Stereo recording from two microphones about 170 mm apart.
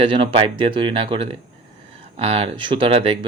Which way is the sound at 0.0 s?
30° right (ahead or behind).